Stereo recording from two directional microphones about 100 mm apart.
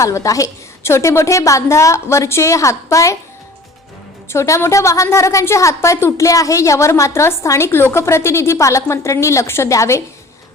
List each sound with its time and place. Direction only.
0.0 s a woman's voice: 35° left (ahead or behind)
4.3 s a woman's voice: 30° left (ahead or behind)